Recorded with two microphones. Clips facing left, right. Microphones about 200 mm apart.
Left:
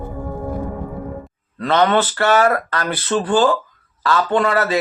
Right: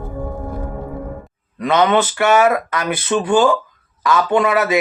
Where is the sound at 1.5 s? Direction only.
15° right (ahead or behind).